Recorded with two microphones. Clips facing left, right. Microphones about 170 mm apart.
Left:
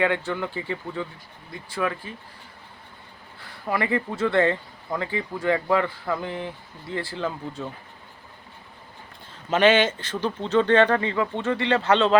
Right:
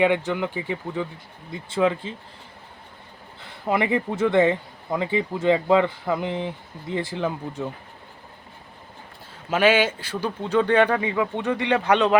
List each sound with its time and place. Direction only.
0.0 s speech: 20° right (ahead or behind)
3.4 s speech: 20° right (ahead or behind)
9.5 s speech: 10° right (ahead or behind)